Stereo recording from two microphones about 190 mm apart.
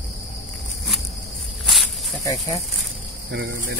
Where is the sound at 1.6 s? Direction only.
Centre (ahead or behind).